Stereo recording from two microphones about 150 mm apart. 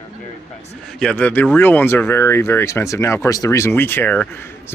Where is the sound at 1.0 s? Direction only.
5° left (ahead or behind).